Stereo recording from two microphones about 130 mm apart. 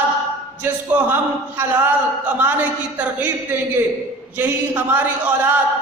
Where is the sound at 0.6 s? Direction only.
15° right (ahead or behind).